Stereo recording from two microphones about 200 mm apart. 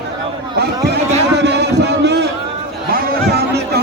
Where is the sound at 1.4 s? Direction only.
60° right (ahead or behind).